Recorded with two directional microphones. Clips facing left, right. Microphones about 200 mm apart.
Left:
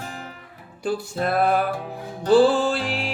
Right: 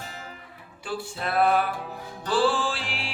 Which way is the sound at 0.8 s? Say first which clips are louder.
Left 7 dB; 45° left (ahead or behind).